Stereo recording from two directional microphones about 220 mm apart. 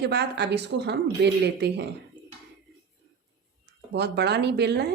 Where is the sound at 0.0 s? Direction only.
50° right (ahead or behind).